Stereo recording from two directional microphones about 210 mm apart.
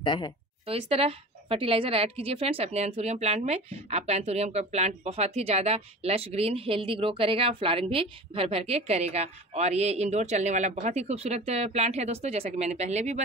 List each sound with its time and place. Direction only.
0.0 s a woman's voice: 20° left (ahead or behind)
0.7 s a woman's voice: 30° right (ahead or behind)